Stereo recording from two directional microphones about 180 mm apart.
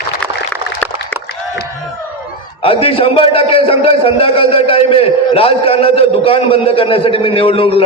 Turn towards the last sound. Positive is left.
turn(degrees=30)  # may be behind; listen again after turning